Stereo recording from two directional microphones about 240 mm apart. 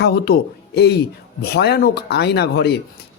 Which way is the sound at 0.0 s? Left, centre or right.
Left.